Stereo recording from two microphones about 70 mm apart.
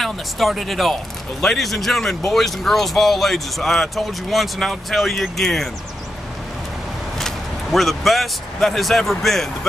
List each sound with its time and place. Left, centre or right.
0.0 s speech: centre
7.2 s speech: centre